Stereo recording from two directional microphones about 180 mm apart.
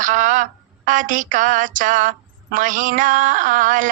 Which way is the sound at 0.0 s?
45° right (ahead or behind).